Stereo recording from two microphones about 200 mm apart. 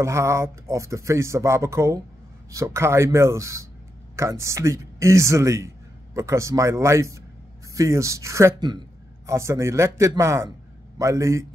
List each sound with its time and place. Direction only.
0.0 s speech: 15° right (ahead or behind)